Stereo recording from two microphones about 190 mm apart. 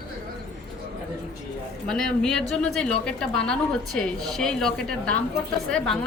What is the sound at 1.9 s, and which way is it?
A woman's voice, 5° left (ahead or behind).